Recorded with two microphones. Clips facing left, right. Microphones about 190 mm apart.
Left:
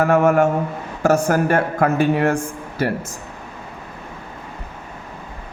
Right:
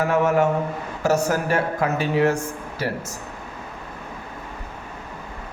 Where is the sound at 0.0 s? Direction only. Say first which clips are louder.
Left 4 dB; 50° left (ahead or behind).